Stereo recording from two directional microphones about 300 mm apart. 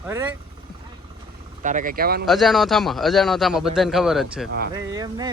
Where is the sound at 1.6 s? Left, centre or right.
Right.